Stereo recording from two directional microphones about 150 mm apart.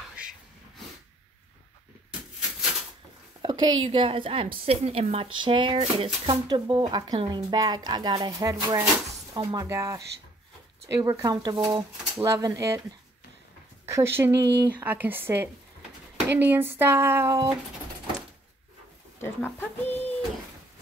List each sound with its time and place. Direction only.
0.1 s a sound: 5° right (ahead or behind)
3.4 s a woman's voice: 35° right (ahead or behind)
13.8 s speech: 15° right (ahead or behind)
19.1 s speech: 15° left (ahead or behind)